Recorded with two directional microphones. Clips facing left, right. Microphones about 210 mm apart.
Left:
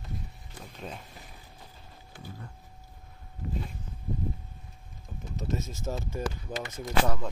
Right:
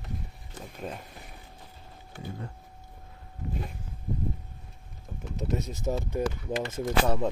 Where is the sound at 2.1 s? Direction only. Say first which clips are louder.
Right 6 dB; 60° right (ahead or behind).